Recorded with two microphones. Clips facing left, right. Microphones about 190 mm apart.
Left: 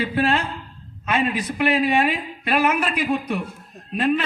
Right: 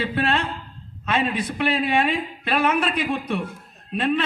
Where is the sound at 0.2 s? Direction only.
5° left (ahead or behind).